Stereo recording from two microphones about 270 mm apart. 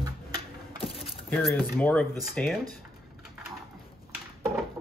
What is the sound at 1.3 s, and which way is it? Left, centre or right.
Speech, centre.